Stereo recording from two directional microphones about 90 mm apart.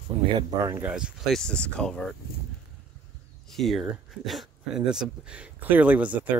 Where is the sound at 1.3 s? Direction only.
10° left (ahead or behind).